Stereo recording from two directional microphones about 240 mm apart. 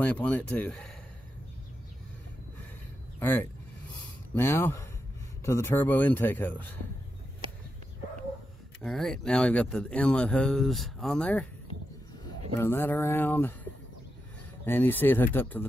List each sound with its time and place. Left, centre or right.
0.0 s speech: centre
3.2 s a man's voice: centre
8.8 s speech: centre
12.5 s a man's voice: centre
14.6 s a man's voice: centre